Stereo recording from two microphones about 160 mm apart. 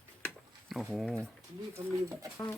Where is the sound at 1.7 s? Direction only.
20° right (ahead or behind).